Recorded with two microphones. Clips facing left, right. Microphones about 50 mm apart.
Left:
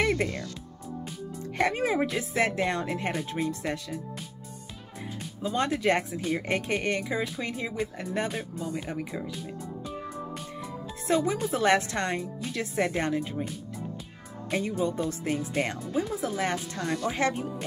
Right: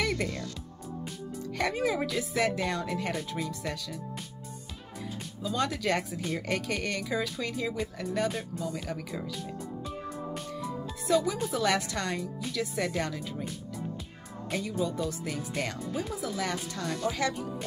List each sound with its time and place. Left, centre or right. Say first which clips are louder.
0.0 s music: left 4 dB; left
1.6 s speech: left 3 dB; left
5.4 s speech: left 3 dB; left
11.1 s speech: left 1 dB; left
14.5 s speech: left 3 dB; left